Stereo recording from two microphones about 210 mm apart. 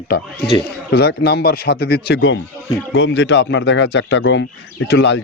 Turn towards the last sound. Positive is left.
turn(degrees=55)  # may be behind; listen again after turning